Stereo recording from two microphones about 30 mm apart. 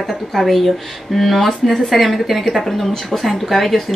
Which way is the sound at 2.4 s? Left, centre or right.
Centre.